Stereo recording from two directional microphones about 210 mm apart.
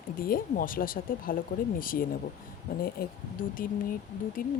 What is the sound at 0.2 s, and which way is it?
Speech, 45° left (ahead or behind).